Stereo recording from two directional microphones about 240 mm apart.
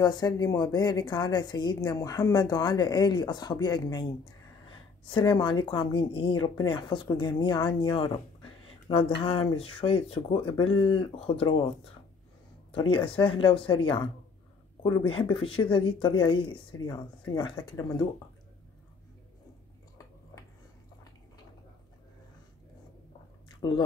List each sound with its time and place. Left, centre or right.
0.0 s a woman's voice: centre
12.7 s a woman's voice: left